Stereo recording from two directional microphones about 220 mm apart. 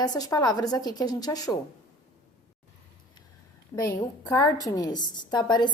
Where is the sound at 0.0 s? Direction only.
15° left (ahead or behind).